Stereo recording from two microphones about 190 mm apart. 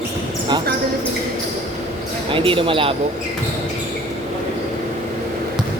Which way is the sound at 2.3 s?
25° right (ahead or behind).